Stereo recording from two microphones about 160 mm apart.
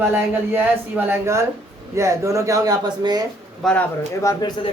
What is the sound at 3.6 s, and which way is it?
Speech, centre (ahead or behind).